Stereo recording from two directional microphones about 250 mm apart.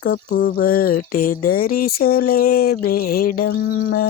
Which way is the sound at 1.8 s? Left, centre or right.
Left.